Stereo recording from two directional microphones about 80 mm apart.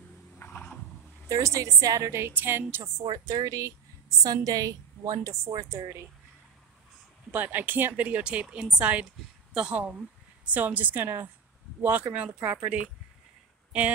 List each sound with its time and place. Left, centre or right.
0.4 s a sound: left
1.3 s a woman's voice: right
3.1 s a woman's voice: right
7.3 s a woman's voice: right
10.4 s a woman's voice: centre